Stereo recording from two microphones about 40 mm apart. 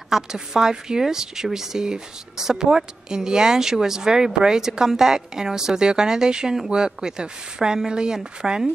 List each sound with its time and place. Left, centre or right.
0.1 s a woman's voice: centre